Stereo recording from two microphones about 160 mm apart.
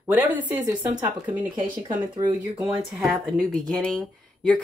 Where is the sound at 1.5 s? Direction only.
30° right (ahead or behind).